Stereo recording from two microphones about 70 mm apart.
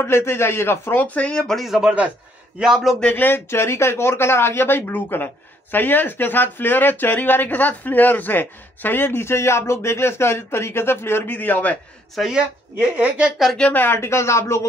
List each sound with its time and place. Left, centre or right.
0.0 s speech: left
1.0 s speech: centre
1.6 s a man's voice: centre
3.0 s speech: left
12.2 s a woman's voice: centre
13.6 s speech: left
13.8 s speech: left